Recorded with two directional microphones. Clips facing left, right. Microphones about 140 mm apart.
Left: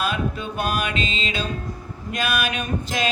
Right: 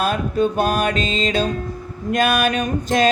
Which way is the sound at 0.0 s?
45° right (ahead or behind).